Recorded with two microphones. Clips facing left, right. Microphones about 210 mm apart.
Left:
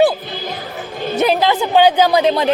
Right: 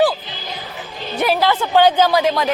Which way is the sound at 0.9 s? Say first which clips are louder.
Left 7 dB; 50° left (ahead or behind).